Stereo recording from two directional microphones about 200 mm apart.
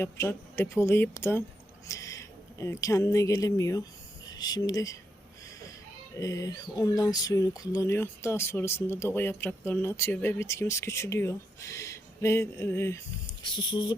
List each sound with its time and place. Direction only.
0.0 s speech: 10° left (ahead or behind)
6.1 s speech: 15° left (ahead or behind)
13.2 s speech: 25° left (ahead or behind)